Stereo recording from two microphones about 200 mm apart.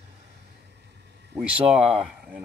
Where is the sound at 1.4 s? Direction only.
5° right (ahead or behind).